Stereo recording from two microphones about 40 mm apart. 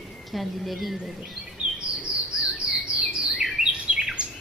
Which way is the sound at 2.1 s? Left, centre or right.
Right.